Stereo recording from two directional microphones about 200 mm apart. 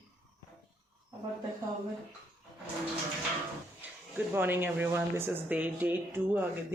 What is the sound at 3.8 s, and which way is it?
Speech, 10° right (ahead or behind).